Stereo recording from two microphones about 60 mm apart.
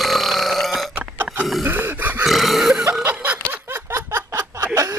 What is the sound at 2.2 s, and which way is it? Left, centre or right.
Burping, centre.